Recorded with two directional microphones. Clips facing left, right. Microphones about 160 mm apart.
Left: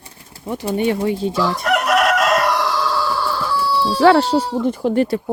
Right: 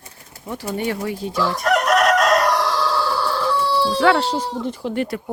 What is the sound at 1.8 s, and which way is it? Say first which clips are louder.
Chicken: even; 5° left (ahead or behind).